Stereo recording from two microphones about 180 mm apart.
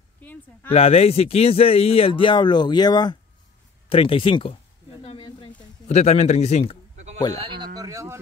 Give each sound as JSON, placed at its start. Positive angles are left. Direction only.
{"t": 0.2, "sound": "speech", "side_deg": 10}
{"t": 0.7, "sound": "speech", "side_deg": 35}
{"t": 5.0, "sound": "a sound", "side_deg": 30}
{"t": 5.9, "sound": "speech", "side_deg": 40}
{"t": 7.3, "sound": "speech", "side_deg": -25}